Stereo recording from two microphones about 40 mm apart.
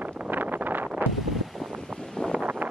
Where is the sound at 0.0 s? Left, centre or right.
Right.